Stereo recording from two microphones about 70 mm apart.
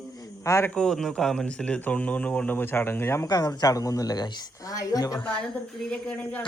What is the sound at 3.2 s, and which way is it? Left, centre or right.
A woman's voice, left.